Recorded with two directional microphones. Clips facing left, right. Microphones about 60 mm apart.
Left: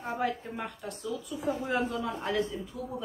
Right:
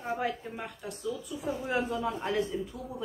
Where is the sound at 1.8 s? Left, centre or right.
Right.